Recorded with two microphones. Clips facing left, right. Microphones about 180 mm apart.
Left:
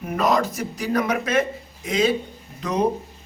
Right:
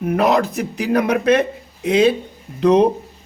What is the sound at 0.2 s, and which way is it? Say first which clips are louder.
Speech: right 3 dB; 60° right (ahead or behind).